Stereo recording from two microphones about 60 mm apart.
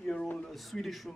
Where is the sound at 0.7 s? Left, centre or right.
Centre.